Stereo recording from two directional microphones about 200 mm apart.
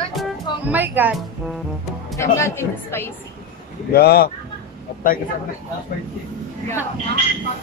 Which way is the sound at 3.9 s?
50° left (ahead or behind).